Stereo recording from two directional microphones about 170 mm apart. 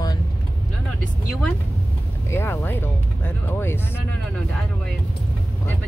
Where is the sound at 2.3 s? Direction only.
15° left (ahead or behind).